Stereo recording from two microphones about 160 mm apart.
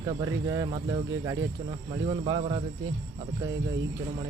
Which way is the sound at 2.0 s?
40° right (ahead or behind).